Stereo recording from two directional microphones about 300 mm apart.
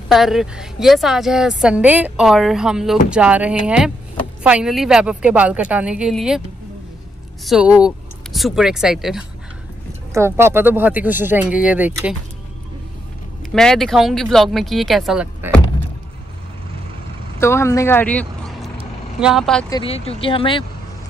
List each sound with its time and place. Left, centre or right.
0.1 s speech: centre
7.4 s speech: centre
13.5 s speech: centre
17.4 s speech: centre
19.7 s speech: centre